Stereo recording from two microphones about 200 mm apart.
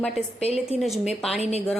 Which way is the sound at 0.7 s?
Centre (ahead or behind).